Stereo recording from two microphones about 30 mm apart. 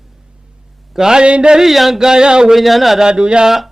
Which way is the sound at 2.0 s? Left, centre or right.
Right.